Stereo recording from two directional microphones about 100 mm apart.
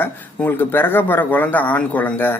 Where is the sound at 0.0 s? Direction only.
20° left (ahead or behind).